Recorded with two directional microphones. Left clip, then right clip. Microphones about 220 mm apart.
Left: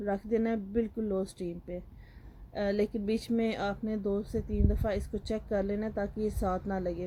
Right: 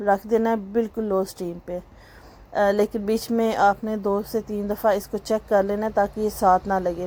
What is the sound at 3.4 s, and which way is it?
Speech, 5° right (ahead or behind).